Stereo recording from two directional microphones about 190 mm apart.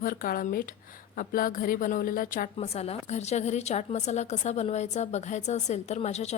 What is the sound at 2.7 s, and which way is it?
A woman's voice, 35° left (ahead or behind).